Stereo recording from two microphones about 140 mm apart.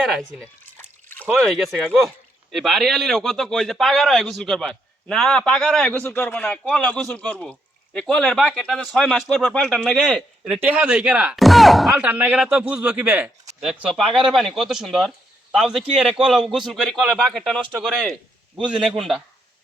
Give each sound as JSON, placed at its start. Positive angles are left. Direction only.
{"t": 1.4, "sound": "speech", "side_deg": 0}
{"t": 11.9, "sound": "speech", "side_deg": -10}